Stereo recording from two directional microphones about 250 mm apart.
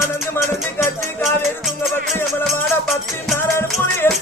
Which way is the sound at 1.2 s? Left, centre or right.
Centre.